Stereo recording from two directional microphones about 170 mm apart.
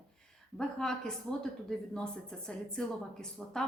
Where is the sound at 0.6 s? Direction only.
5° left (ahead or behind).